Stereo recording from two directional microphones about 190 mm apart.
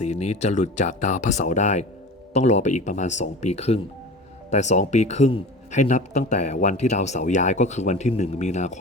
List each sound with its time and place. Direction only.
0.0 s speech: 35° left (ahead or behind)